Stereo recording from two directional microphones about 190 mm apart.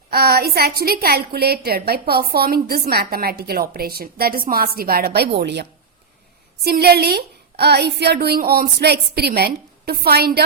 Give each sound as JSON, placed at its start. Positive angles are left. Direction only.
{"t": 0.1, "sound": "a woman's voice", "side_deg": -55}
{"t": 6.7, "sound": "a woman's voice", "side_deg": -55}